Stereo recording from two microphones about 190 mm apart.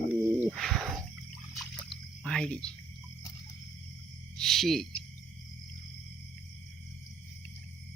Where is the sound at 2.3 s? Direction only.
5° left (ahead or behind).